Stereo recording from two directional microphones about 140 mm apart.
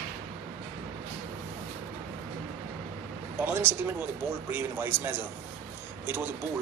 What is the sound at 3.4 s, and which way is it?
Speech, 15° right (ahead or behind).